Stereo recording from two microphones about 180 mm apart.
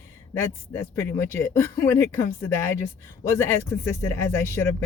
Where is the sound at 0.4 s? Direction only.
15° left (ahead or behind).